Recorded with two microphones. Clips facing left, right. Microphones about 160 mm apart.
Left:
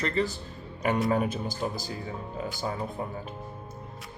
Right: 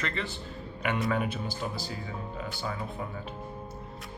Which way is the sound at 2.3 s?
40° left (ahead or behind).